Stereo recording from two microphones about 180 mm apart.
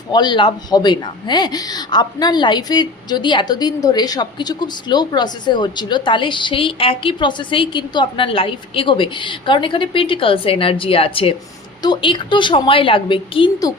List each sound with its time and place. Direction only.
0.1 s speech: 25° left (ahead or behind)